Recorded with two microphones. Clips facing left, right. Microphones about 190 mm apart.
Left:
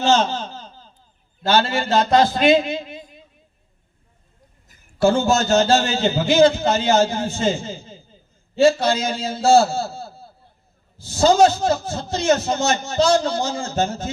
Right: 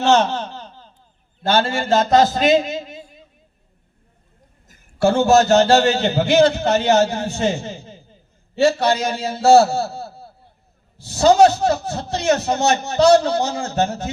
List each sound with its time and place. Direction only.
0.0 s laughter: 65° right (ahead or behind)
1.5 s a man's voice: 50° right (ahead or behind)
4.7 s a man's voice: 60° right (ahead or behind)